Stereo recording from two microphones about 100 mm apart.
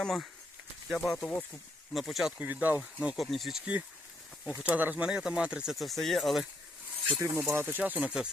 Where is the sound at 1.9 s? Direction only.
Centre (ahead or behind).